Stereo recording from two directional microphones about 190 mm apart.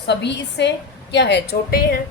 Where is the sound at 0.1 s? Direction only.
65° left (ahead or behind).